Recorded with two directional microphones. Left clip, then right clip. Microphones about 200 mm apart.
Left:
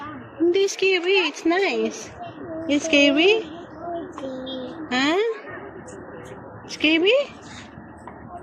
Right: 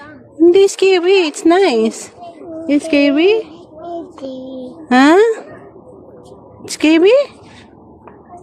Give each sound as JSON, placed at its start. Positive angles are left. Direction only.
{"t": 0.5, "sound": "speech", "side_deg": -65}
{"t": 4.9, "sound": "a woman's voice", "side_deg": -65}
{"t": 6.7, "sound": "speech", "side_deg": -70}